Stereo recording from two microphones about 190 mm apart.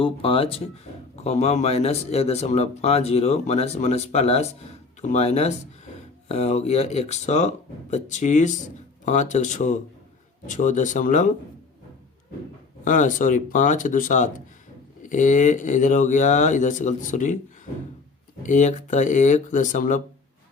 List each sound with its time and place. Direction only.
0.0 s speech: 30° left (ahead or behind)
12.8 s speech: 40° left (ahead or behind)
18.4 s speech: 40° left (ahead or behind)